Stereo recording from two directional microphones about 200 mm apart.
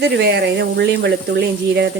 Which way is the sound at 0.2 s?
55° right (ahead or behind).